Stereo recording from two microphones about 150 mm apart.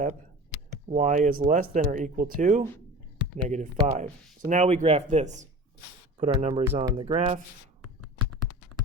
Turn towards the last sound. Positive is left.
turn(degrees=-35)  # may be behind; listen again after turning